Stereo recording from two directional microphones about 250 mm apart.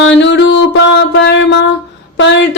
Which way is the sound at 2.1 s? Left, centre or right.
Left.